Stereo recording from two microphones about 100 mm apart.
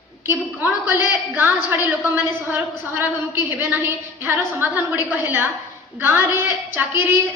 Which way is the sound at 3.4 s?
20° right (ahead or behind).